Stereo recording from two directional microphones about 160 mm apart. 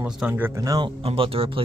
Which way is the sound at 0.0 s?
10° right (ahead or behind).